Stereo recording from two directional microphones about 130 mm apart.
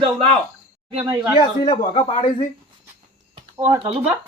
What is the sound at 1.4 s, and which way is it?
Speech, 40° left (ahead or behind).